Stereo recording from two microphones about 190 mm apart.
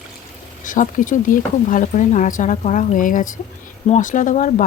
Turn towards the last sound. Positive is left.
turn(degrees=45)  # may be behind; listen again after turning